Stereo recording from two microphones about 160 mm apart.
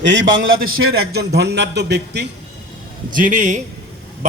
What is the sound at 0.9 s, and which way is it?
A man's voice, 85° right.